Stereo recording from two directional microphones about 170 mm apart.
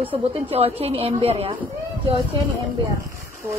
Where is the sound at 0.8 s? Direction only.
35° right (ahead or behind).